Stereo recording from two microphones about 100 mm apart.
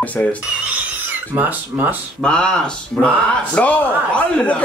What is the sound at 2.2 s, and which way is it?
Speech, 10° left (ahead or behind).